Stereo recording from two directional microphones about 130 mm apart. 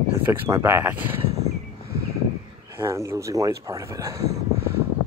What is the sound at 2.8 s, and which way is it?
Speech, 20° right (ahead or behind).